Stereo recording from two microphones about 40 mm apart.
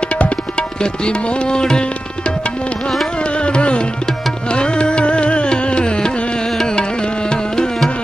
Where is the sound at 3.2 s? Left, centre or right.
Left.